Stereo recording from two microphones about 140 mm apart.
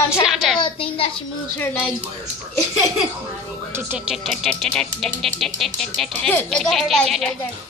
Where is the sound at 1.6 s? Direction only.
10° left (ahead or behind).